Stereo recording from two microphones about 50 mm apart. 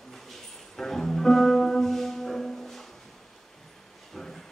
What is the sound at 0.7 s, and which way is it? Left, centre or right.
Music, centre.